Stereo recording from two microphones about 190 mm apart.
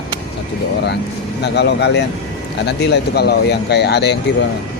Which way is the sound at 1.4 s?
65° left (ahead or behind).